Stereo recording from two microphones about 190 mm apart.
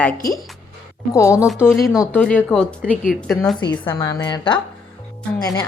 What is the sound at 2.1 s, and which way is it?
A woman's voice, 10° left (ahead or behind).